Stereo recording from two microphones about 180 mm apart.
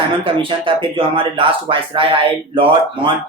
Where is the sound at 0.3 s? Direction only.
30° right (ahead or behind).